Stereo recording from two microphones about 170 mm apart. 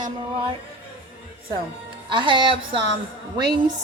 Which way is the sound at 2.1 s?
30° right (ahead or behind).